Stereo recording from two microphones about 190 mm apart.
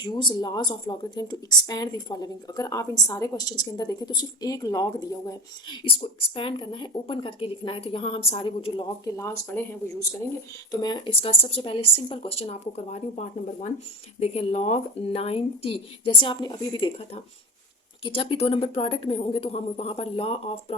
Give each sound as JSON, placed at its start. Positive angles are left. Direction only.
{"t": 0.0, "sound": "speech", "side_deg": 25}
{"t": 10.7, "sound": "speech", "side_deg": 20}